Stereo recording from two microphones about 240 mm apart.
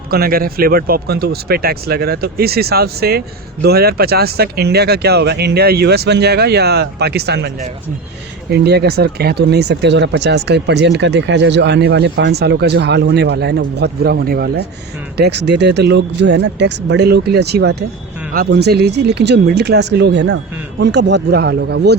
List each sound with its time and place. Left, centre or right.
0.1 s speech: right